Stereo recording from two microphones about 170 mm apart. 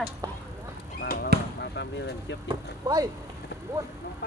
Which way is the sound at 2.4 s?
20° right (ahead or behind).